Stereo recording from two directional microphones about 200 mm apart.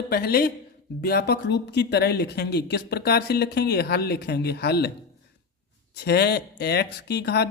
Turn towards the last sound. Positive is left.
turn(degrees=55)  # may be behind; listen again after turning